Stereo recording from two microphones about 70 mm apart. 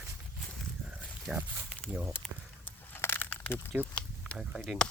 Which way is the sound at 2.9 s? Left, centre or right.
Left.